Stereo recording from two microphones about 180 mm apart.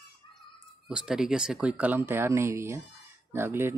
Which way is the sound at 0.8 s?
5° right (ahead or behind).